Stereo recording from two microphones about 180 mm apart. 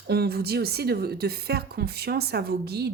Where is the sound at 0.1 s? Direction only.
60° right (ahead or behind).